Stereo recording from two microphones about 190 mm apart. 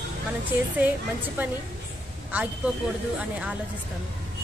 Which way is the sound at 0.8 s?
10° right (ahead or behind).